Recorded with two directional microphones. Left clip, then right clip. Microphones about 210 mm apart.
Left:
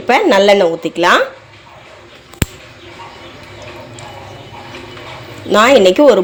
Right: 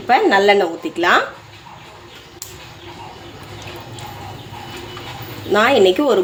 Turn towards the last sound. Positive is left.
turn(degrees=25)  # may be behind; listen again after turning